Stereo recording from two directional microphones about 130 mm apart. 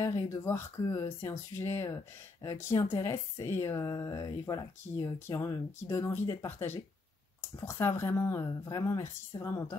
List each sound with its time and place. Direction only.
0.0 s speech: 25° left (ahead or behind)